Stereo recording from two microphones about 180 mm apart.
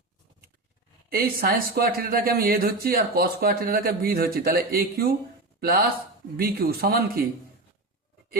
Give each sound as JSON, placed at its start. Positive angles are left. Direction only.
{"t": 1.1, "sound": "speech", "side_deg": -55}